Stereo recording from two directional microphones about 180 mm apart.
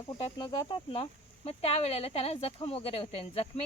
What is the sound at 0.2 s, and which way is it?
A woman's voice, 30° left (ahead or behind).